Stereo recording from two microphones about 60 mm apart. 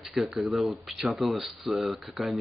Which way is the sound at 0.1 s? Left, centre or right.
Centre.